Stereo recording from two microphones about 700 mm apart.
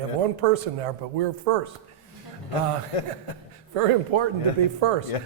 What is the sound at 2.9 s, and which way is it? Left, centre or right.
Speech, left.